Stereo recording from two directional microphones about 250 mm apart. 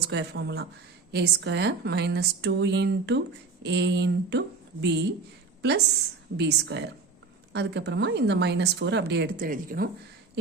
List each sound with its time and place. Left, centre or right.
0.1 s a woman's voice: right
6.3 s a woman's voice: right